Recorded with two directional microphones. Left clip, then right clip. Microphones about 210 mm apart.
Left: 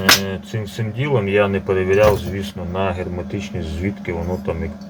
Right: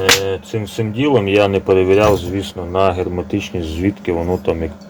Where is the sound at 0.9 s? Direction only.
45° right (ahead or behind).